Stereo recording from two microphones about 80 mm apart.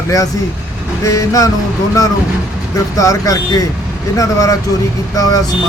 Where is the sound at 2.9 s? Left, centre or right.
Left.